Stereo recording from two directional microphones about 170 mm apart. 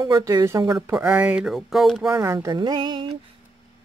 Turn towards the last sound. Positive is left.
turn(degrees=-25)  # may be behind; listen again after turning